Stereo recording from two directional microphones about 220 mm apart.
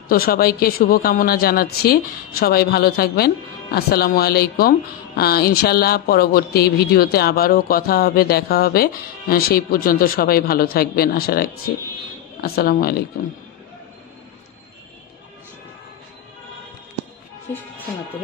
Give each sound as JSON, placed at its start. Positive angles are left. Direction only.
{"t": 0.1, "sound": "speech", "side_deg": 40}